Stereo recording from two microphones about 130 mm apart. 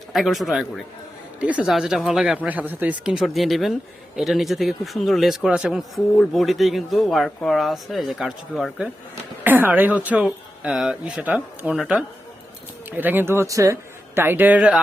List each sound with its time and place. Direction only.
0.1 s speech: centre (ahead or behind)
9.4 s speech: 15° right (ahead or behind)
12.9 s speech: 15° right (ahead or behind)